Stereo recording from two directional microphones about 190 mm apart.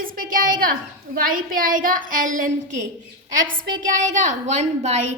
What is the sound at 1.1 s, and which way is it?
A woman's voice, 45° right (ahead or behind).